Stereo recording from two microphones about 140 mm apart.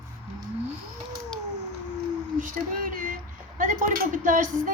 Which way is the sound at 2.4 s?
70° right (ahead or behind).